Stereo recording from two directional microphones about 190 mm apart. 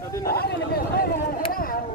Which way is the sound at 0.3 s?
55° left (ahead or behind).